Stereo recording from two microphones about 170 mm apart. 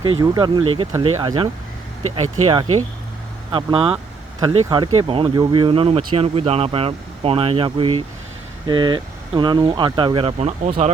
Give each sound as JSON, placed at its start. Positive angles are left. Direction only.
{"t": 0.2, "sound": "speech", "side_deg": -25}